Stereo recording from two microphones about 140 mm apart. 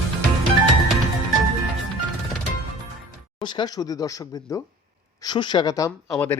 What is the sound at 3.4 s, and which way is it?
Speech, 35° left (ahead or behind).